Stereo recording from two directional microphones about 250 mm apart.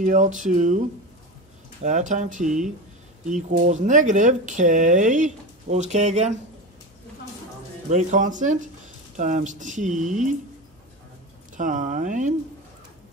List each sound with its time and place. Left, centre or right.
0.0 s speech: right
7.9 s speech: right
11.5 s speech: right